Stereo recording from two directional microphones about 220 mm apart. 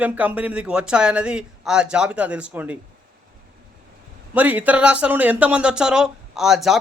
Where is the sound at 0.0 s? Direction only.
5° right (ahead or behind).